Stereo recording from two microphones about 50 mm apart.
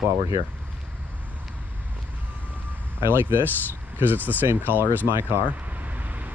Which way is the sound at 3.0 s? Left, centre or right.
Right.